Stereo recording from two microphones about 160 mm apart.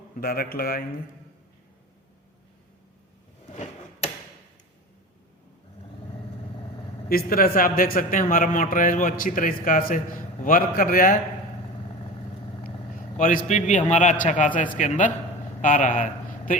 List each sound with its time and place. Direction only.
0.2 s a man's voice: 65° left (ahead or behind)
3.5 s tick-tock: 45° left (ahead or behind)
7.1 s a man's voice: 65° left (ahead or behind)
13.1 s a man's voice: 50° left (ahead or behind)